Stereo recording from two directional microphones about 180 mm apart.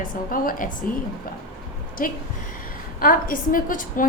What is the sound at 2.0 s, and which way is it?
A woman's voice, 50° left (ahead or behind).